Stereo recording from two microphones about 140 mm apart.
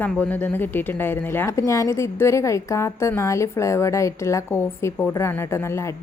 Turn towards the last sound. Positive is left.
turn(degrees=20)  # may be behind; listen again after turning